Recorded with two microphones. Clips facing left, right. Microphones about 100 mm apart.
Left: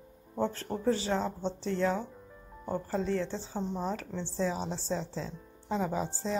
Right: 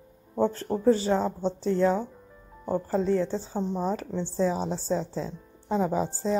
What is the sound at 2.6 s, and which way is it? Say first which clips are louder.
Speech: right 6 dB; 30° right (ahead or behind).